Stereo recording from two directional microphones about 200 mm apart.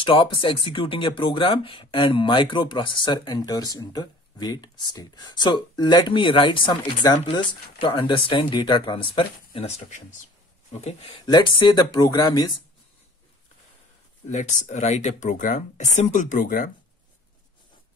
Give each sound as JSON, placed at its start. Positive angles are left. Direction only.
{"t": 0.0, "sound": "speech", "side_deg": 25}
{"t": 14.3, "sound": "speech", "side_deg": 35}